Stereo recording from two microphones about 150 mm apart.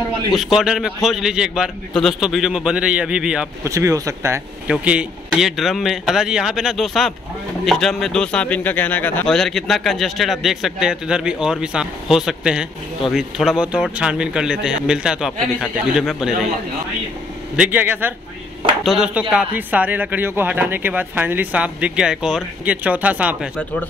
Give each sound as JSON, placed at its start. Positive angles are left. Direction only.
{"t": 0.3, "sound": "speech", "side_deg": 0}
{"t": 3.6, "sound": "speech", "side_deg": -20}
{"t": 4.6, "sound": "speech", "side_deg": -5}
{"t": 17.6, "sound": "speech", "side_deg": -10}